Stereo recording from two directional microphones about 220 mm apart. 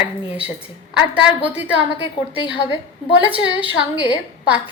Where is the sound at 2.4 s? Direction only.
20° left (ahead or behind).